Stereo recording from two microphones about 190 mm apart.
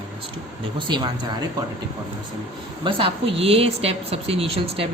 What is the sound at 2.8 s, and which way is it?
Speech, 30° right (ahead or behind).